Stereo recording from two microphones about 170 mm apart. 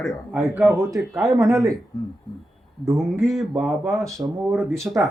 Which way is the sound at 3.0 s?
Centre (ahead or behind).